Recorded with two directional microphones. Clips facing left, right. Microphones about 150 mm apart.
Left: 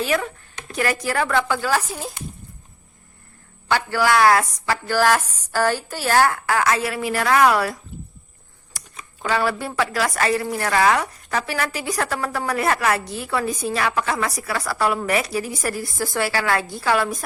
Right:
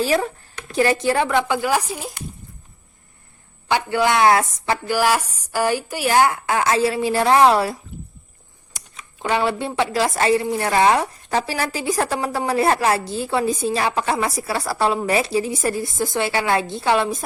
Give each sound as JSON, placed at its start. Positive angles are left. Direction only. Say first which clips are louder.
{"t": 0.0, "sound": "a woman's voice", "louder": "right 3 dB", "side_deg": -35}
{"t": 3.7, "sound": "a woman's voice", "louder": "right 1 dB", "side_deg": -20}
{"t": 4.9, "sound": "a woman's voice", "louder": "left 3 dB", "side_deg": -10}
{"t": 9.3, "sound": "a woman's voice", "louder": "right 1 dB", "side_deg": -25}